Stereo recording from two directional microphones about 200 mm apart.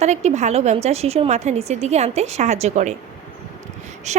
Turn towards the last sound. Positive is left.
turn(degrees=-35)  # may be behind; listen again after turning